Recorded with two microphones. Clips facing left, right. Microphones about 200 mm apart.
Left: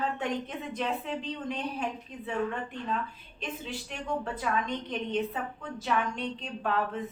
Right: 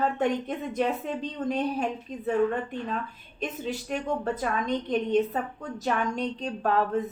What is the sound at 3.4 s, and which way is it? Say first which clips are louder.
A woman's voice: right 6 dB; 45° right (ahead or behind).